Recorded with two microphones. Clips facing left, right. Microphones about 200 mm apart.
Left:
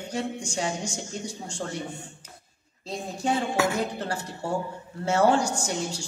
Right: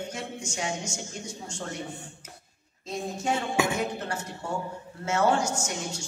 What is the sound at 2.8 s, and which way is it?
Speech, 35° left (ahead or behind).